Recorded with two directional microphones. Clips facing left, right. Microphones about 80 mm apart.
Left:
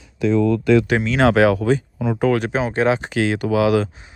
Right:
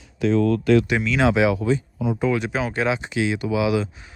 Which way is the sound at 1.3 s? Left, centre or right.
Left.